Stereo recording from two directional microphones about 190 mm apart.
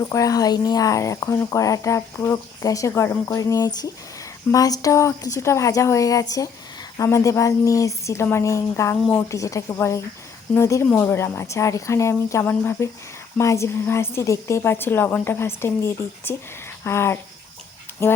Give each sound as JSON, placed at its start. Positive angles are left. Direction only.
{"t": 0.0, "sound": "a woman's voice", "side_deg": 20}
{"t": 9.3, "sound": "a woman's voice", "side_deg": 15}